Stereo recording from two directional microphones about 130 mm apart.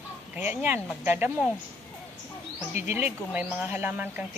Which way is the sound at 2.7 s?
20° right (ahead or behind).